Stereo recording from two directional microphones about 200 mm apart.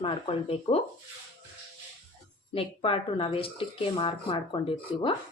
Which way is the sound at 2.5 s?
25° left (ahead or behind).